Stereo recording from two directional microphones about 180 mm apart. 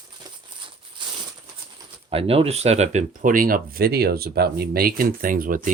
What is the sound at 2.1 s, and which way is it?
Speech, 35° right (ahead or behind).